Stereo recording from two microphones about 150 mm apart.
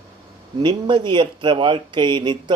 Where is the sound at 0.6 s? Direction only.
30° right (ahead or behind).